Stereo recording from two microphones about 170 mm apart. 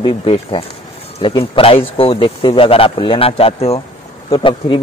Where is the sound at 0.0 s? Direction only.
30° left (ahead or behind).